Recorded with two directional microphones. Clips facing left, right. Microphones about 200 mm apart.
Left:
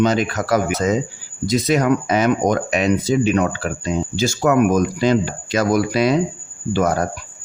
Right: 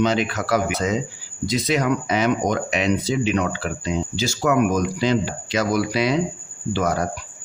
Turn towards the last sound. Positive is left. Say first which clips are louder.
# left 4 dB
turn(degrees=50)  # may be behind; listen again after turning